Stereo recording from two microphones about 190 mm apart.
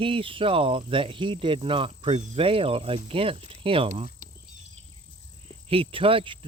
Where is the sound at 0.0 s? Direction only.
30° right (ahead or behind).